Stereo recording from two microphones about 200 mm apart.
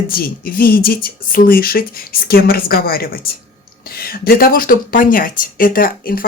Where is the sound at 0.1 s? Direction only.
45° left (ahead or behind).